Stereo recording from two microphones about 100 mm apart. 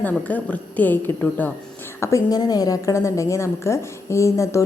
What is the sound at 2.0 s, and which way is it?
A woman's voice, 35° left (ahead or behind).